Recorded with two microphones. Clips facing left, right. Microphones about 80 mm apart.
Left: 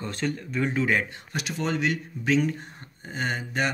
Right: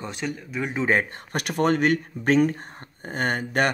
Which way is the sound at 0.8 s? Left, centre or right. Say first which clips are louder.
Right 2 dB; right.